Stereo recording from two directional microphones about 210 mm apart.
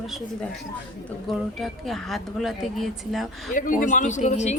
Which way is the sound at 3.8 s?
35° left (ahead or behind).